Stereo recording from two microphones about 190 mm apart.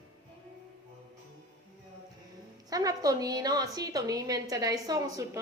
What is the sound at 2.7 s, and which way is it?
A woman's voice, 20° right (ahead or behind).